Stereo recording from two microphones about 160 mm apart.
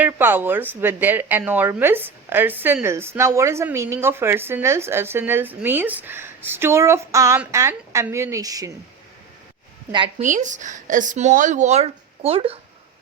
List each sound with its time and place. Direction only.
0.0 s speech: 15° right (ahead or behind)
10.2 s speech: 50° right (ahead or behind)